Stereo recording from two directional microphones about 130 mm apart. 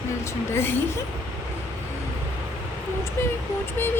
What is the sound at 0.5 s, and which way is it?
Speech, 20° left (ahead or behind).